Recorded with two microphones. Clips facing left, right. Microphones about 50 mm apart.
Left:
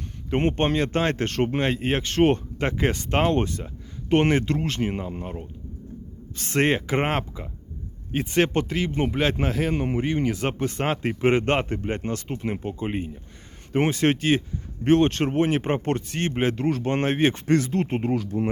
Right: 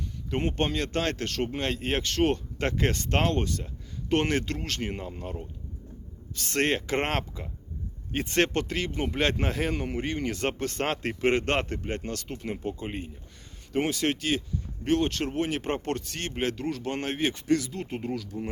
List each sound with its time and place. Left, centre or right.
0.3 s speech: left
1.6 s speech: centre
2.1 s speech: left
2.6 s speech: centre
3.3 s speech: left
6.6 s a man's voice: centre
9.7 s speech: left
10.2 s speech: centre
13.7 s speech: left
16.6 s speech: left